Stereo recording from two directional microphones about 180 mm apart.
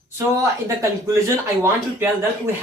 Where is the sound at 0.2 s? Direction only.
15° right (ahead or behind).